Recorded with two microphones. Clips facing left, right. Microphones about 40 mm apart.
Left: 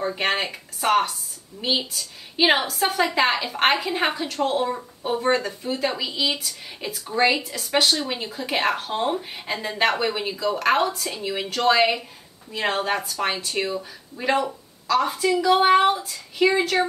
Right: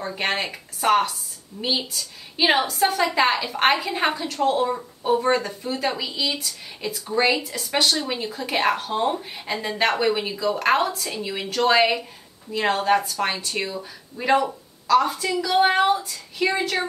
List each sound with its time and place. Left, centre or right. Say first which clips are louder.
0.0 s a woman's voice: left 2 dB; centre
15.3 s a woman's voice: left 2 dB; left; by 16.8 s centre